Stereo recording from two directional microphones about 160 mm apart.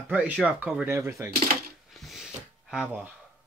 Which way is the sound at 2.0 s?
Centre (ahead or behind).